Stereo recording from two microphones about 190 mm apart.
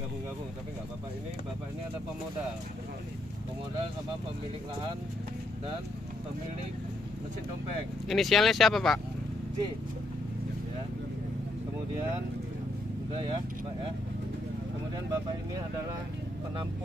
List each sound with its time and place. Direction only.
8.1 s speech: centre (ahead or behind)
13.1 s speech: 25° right (ahead or behind)